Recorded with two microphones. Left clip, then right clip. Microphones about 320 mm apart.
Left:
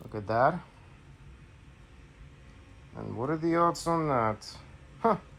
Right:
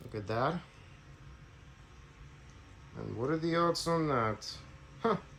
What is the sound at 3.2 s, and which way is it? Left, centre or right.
Speech, centre.